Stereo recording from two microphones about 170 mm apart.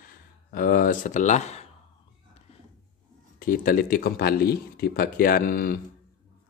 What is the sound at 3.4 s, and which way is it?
Speech, 55° left (ahead or behind).